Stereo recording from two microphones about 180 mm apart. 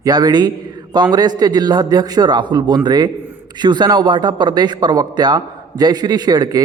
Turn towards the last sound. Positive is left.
turn(degrees=-20)  # may be behind; listen again after turning